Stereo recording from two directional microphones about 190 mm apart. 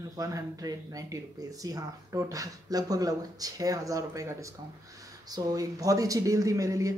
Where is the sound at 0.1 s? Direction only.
20° right (ahead or behind).